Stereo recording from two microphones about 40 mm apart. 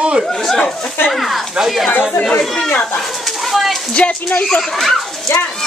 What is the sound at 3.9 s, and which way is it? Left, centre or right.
Speech, left.